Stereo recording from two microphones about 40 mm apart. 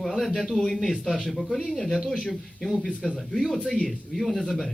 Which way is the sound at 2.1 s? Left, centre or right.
Left.